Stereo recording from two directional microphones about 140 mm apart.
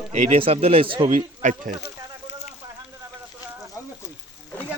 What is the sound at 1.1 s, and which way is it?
Speech, 70° right (ahead or behind).